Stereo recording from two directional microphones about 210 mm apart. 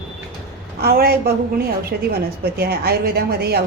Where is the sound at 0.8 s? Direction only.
45° right (ahead or behind).